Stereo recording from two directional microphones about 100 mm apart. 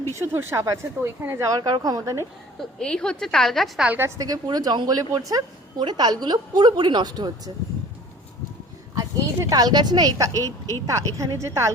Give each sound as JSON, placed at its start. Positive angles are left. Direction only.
{"t": 0.2, "sound": "speech", "side_deg": -25}
{"t": 1.5, "sound": "a woman's voice", "side_deg": -40}
{"t": 2.6, "sound": "a woman's voice", "side_deg": 5}
{"t": 3.8, "sound": "speech", "side_deg": -20}
{"t": 4.2, "sound": "a woman's voice", "side_deg": -40}
{"t": 9.0, "sound": "a woman's voice", "side_deg": -35}